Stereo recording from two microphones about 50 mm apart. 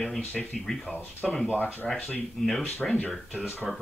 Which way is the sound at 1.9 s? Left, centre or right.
Left.